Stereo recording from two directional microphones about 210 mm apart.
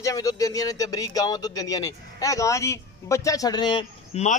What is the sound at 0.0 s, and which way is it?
A man's voice, 15° left (ahead or behind).